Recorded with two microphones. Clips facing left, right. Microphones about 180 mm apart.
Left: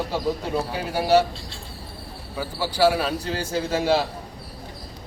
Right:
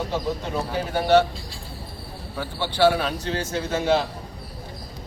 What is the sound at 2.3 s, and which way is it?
A man's voice, 5° left (ahead or behind).